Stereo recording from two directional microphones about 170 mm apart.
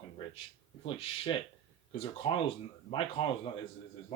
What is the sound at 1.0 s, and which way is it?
Speech, 35° left (ahead or behind).